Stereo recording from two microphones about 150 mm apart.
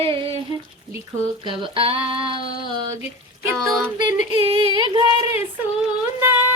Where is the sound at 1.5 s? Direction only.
35° right (ahead or behind).